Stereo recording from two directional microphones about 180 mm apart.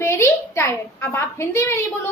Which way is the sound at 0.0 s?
15° left (ahead or behind).